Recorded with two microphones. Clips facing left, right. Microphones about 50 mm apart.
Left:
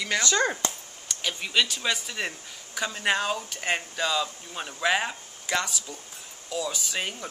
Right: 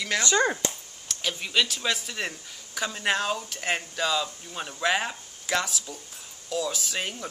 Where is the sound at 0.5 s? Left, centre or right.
Centre.